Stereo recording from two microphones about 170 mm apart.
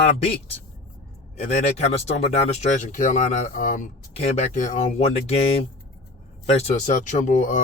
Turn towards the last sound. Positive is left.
turn(degrees=50)  # may be behind; listen again after turning